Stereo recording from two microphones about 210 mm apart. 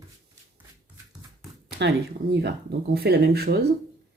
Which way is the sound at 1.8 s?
55° right (ahead or behind).